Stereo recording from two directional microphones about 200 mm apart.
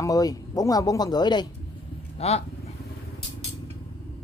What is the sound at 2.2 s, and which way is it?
Speech, 30° left (ahead or behind).